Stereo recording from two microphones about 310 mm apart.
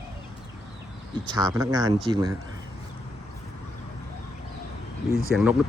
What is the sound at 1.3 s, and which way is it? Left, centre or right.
Speech, centre.